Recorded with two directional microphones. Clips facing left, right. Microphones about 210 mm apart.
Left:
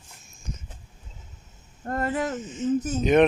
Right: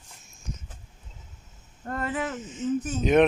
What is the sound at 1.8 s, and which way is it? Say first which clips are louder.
Speech: left 3 dB; 40° left (ahead or behind).